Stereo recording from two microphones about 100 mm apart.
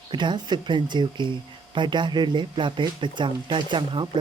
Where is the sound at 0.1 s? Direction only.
50° right (ahead or behind).